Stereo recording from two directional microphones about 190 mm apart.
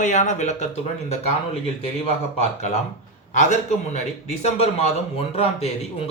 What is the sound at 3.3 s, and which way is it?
Speech, 40° left (ahead or behind).